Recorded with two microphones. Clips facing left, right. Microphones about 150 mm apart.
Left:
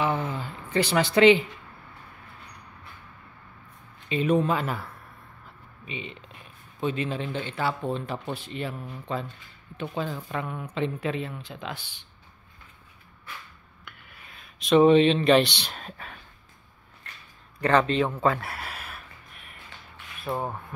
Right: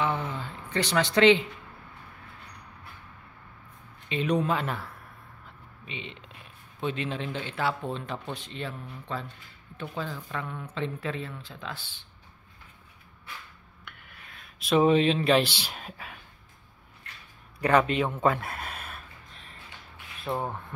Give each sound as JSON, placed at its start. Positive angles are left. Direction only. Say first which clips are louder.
{"t": 0.0, "sound": "a sound", "louder": "left 2 dB", "side_deg": 10}
{"t": 4.1, "sound": "speech", "louder": "left 3 dB", "side_deg": 5}
{"t": 10.4, "sound": "speech", "louder": "left 4 dB", "side_deg": 10}
{"t": 13.8, "sound": "speech", "louder": "left 1 dB", "side_deg": 0}
{"t": 17.6, "sound": "a man's voice", "louder": "left 1 dB", "side_deg": -10}
{"t": 18.1, "sound": "a sound", "louder": "left 1 dB", "side_deg": -20}
{"t": 20.2, "sound": "speech", "louder": "left 1 dB", "side_deg": 5}